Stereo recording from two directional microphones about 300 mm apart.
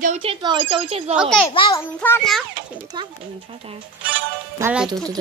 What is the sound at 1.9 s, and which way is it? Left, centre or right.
Speech, centre.